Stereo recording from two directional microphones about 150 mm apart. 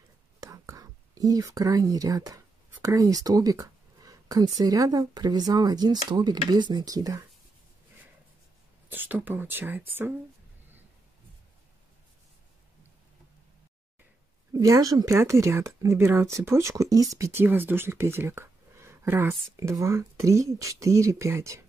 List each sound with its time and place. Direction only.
0.4 s whispering: 25° right (ahead or behind)
4.6 s speech: 25° right (ahead or behind)
8.9 s speech: 10° right (ahead or behind)
14.5 s speech: 20° right (ahead or behind)